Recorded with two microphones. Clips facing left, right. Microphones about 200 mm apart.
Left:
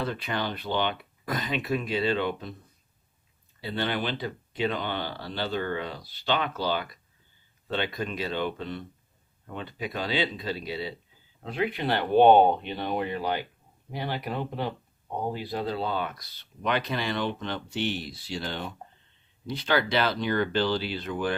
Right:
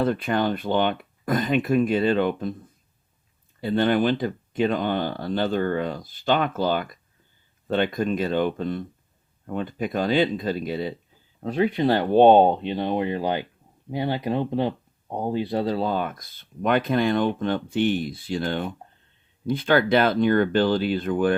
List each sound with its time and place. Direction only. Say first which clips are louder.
0.0 s speech: right 8 dB; 50° right (ahead or behind)
3.6 s speech: right 9 dB; 45° right (ahead or behind)